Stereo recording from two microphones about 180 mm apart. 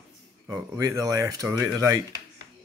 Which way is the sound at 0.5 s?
20° right (ahead or behind).